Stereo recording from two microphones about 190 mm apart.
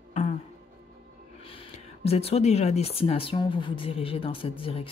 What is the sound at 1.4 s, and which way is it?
Speech, 30° left (ahead or behind).